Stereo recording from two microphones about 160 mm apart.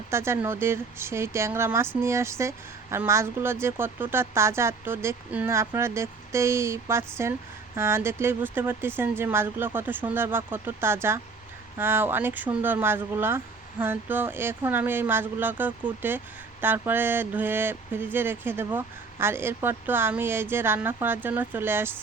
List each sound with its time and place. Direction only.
0.1 s speech: 15° right (ahead or behind)